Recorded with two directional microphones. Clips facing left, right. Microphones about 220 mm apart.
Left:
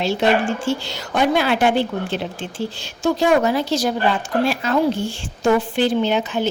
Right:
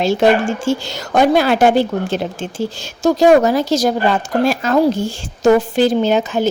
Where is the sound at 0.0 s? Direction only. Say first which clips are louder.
Right 5 dB; 45° right (ahead or behind).